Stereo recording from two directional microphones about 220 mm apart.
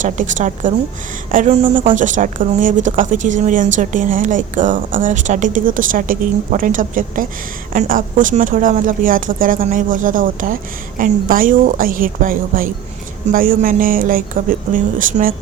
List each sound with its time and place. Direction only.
0.0 s a woman's voice: 35° right (ahead or behind)